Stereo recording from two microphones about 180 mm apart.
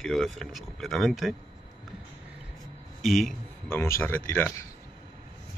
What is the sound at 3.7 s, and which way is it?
Speech, 15° left (ahead or behind).